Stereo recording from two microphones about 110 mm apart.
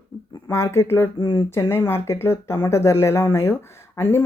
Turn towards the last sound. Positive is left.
turn(degrees=20)  # may be behind; listen again after turning